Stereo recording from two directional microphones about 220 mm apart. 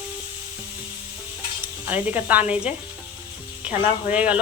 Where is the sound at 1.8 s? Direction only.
10° right (ahead or behind).